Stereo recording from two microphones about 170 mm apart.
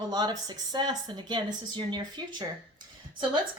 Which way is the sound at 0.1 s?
25° right (ahead or behind).